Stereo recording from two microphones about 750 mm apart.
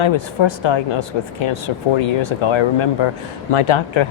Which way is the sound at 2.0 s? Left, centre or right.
Left.